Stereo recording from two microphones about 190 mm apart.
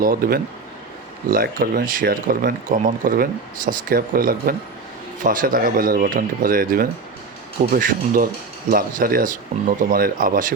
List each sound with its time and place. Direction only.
0.0 s speech: 50° right (ahead or behind)